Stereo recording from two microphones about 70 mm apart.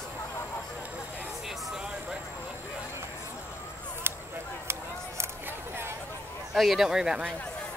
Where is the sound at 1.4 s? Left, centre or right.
Centre.